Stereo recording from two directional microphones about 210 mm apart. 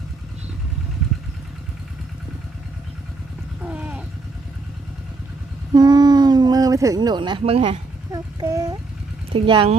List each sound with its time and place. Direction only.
3.6 s sheep: 5° right (ahead or behind)
5.7 s a sound: 20° right (ahead or behind)
9.3 s speech: 25° right (ahead or behind)